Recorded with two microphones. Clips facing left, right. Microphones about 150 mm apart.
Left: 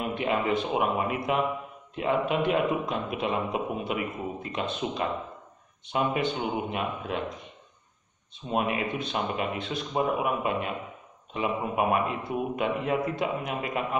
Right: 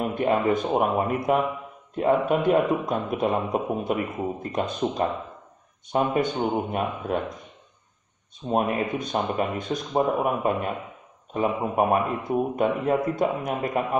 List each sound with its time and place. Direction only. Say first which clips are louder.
0.0 s a man's voice: right 5 dB; 45° right (ahead or behind)
8.5 s a man's voice: right 4 dB; 45° right (ahead or behind)